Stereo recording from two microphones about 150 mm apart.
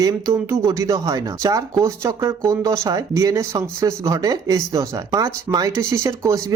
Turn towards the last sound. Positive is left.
turn(degrees=-20)  # may be behind; listen again after turning